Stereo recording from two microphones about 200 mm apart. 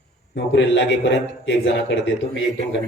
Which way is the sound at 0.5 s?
65° left (ahead or behind).